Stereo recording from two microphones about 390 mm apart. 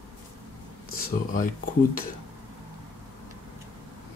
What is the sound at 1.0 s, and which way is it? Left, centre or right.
Speech, left.